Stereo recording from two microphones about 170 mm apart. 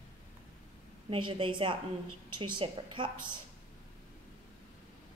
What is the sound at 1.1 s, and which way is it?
A woman's voice, 30° right (ahead or behind).